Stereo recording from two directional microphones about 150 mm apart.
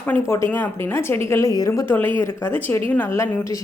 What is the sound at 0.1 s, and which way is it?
Speech, 15° left (ahead or behind).